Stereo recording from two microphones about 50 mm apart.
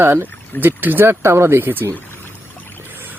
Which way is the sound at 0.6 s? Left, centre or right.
Right.